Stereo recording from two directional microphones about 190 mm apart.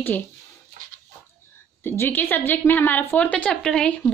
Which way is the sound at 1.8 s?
10° left (ahead or behind).